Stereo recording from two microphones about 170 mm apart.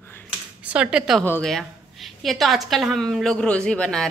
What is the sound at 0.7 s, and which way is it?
Speech, 5° right (ahead or behind).